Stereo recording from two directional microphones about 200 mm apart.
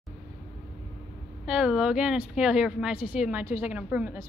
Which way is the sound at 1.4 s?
5° right (ahead or behind).